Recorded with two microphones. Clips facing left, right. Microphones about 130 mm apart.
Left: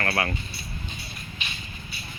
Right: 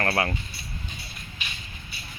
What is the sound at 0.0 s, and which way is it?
Speech, 25° right (ahead or behind).